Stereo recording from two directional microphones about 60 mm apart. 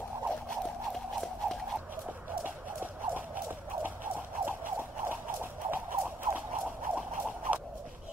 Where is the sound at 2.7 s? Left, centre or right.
Right.